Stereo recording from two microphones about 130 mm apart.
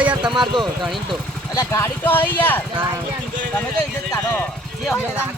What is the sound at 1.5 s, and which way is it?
Speech, 20° left (ahead or behind).